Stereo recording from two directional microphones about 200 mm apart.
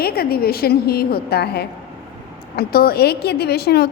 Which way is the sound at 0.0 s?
50° left (ahead or behind).